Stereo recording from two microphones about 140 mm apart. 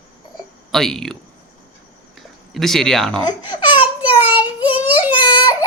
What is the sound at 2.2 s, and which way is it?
Speech, centre (ahead or behind).